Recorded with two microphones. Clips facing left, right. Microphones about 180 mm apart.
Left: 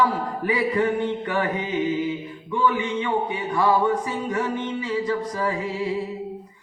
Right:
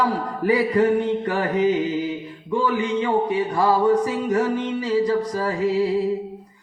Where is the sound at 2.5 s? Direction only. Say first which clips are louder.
Right 2 dB; 35° right (ahead or behind).